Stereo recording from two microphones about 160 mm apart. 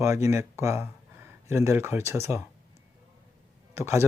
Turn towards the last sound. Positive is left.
turn(degrees=-15)  # may be behind; listen again after turning